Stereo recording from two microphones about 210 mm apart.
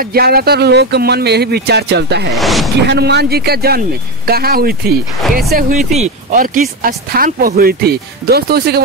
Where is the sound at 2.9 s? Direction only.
55° right (ahead or behind).